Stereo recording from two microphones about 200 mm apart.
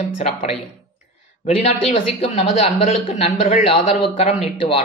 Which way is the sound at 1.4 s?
30° left (ahead or behind).